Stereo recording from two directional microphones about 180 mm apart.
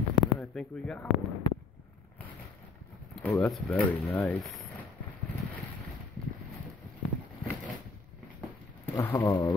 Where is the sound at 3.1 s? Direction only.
10° left (ahead or behind).